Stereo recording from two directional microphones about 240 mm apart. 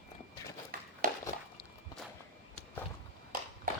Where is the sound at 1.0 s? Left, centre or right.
Right.